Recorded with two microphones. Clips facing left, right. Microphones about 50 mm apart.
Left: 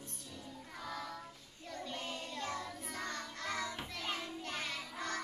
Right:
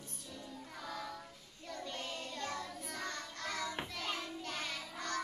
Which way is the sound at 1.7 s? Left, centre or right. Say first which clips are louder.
Even; centre.